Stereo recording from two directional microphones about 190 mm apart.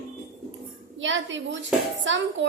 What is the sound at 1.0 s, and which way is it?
A woman's voice, 75° right (ahead or behind).